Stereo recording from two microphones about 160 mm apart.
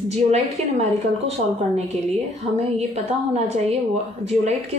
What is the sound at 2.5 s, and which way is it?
Speech, 40° right (ahead or behind).